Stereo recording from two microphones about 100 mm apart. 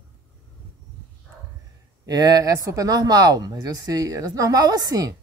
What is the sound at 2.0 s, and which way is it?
Speech, 40° right (ahead or behind).